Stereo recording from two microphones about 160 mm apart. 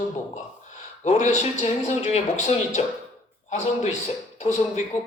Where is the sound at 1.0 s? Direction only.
45° left (ahead or behind).